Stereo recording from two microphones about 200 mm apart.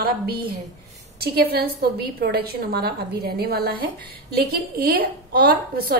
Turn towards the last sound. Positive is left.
turn(degrees=-50)  # may be behind; listen again after turning